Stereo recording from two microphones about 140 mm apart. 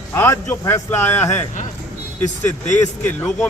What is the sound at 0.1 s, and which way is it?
A man's voice, 15° left (ahead or behind).